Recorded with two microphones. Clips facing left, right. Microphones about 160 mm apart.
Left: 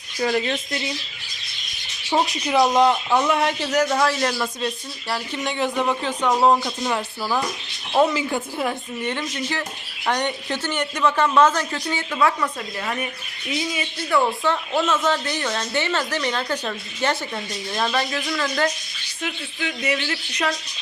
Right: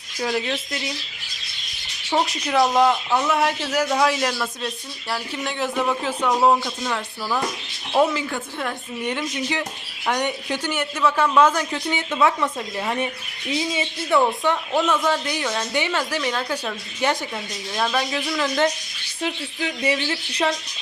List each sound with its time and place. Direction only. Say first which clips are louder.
0.2 s speech: left 2 dB; centre (ahead or behind)
2.3 s speech: left 1 dB; centre (ahead or behind)
4.2 s speech: left 2 dB; centre (ahead or behind)
6.8 s speech: left 2 dB; 15° left (ahead or behind)
7.9 s speech: left 1 dB; centre (ahead or behind)
9.0 s a woman's voice: right 1 dB; 10° right (ahead or behind)
18.3 s a woman's voice: right 4 dB; 15° right (ahead or behind)
19.2 s speech: right 2 dB; 35° right (ahead or behind)